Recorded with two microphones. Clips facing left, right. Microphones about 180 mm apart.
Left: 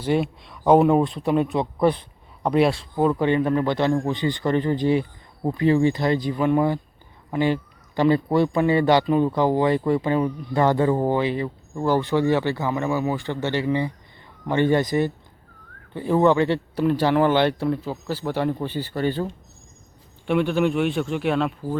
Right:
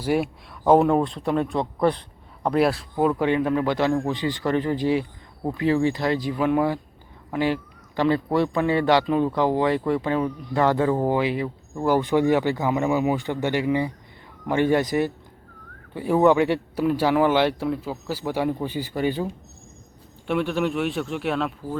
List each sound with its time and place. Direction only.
0.0 s a man's voice: 5° right (ahead or behind)
20.2 s a man's voice: centre (ahead or behind)